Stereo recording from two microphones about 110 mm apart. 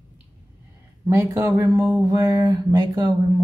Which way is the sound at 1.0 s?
25° right (ahead or behind).